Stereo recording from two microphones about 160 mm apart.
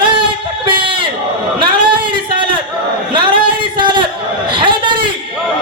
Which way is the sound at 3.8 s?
30° right (ahead or behind).